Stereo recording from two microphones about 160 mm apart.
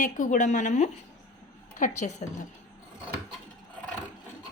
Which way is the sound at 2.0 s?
45° left (ahead or behind).